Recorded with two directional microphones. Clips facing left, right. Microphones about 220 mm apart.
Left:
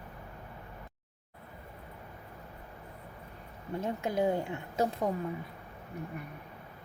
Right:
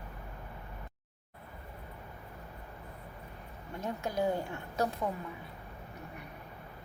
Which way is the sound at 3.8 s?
25° left (ahead or behind).